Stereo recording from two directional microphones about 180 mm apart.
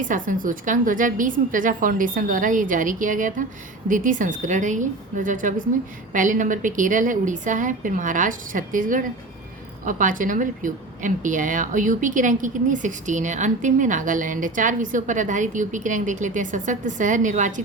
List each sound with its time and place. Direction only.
0.0 s a woman's voice: 45° right (ahead or behind)